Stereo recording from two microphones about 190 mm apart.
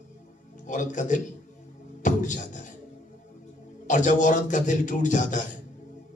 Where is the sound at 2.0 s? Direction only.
40° left (ahead or behind).